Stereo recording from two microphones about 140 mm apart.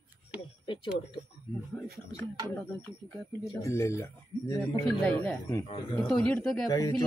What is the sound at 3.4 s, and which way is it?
Speech, 20° left (ahead or behind).